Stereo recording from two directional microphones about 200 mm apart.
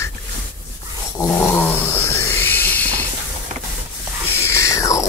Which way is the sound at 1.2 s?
10° left (ahead or behind).